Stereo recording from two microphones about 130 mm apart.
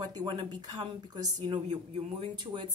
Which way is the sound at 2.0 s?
55° right (ahead or behind).